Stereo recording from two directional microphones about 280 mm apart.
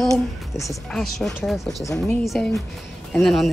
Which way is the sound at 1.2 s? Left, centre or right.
Centre.